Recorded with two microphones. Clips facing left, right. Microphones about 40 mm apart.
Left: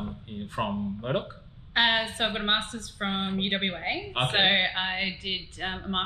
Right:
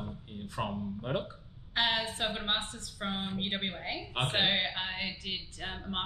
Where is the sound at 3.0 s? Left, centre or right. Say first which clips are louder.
Left 6 dB; left.